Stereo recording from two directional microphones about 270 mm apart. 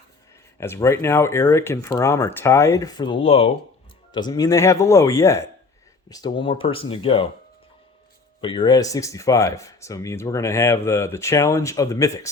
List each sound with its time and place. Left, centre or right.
0.6 s speech: centre
8.4 s speech: centre